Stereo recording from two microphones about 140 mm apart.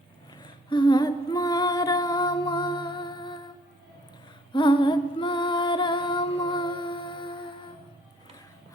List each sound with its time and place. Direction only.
0.4 s humming: 35° left (ahead or behind)
4.5 s music: 35° left (ahead or behind)